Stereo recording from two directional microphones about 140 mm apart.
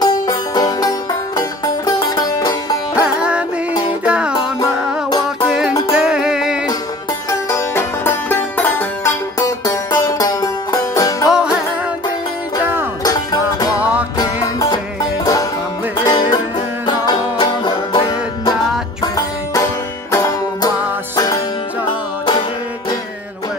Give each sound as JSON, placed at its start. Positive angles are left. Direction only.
{"t": 0.0, "sound": "music", "side_deg": 25}
{"t": 3.0, "sound": "music", "side_deg": -10}
{"t": 5.9, "sound": "music", "side_deg": -5}
{"t": 7.2, "sound": "music", "side_deg": 20}
{"t": 9.7, "sound": "music", "side_deg": 25}
{"t": 11.2, "sound": "music", "side_deg": -5}
{"t": 13.0, "sound": "music", "side_deg": 25}
{"t": 13.7, "sound": "music", "side_deg": -10}
{"t": 14.1, "sound": "music", "side_deg": 25}
{"t": 16.0, "sound": "music", "side_deg": 30}
{"t": 21.8, "sound": "music", "side_deg": 35}